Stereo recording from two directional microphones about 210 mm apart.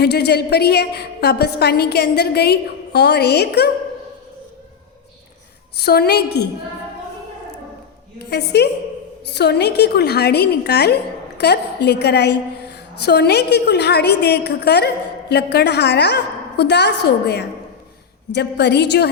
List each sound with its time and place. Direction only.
0.0 s a woman's voice: 50° left (ahead or behind)
5.8 s a woman's voice: 50° left (ahead or behind)
8.2 s a woman's voice: 50° left (ahead or behind)